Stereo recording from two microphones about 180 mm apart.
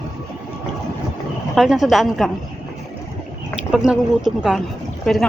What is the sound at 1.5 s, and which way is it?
Speech, centre (ahead or behind).